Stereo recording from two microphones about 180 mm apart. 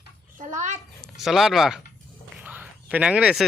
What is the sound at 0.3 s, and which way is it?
Speech, 45° right (ahead or behind).